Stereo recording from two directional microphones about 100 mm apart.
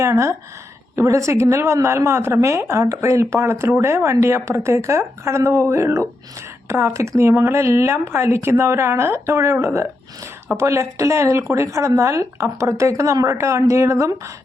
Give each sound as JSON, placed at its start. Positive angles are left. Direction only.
{"t": 0.0, "sound": "a woman's voice", "side_deg": -30}